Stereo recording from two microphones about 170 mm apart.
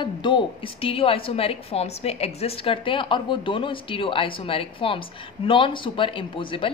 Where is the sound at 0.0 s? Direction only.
30° left (ahead or behind).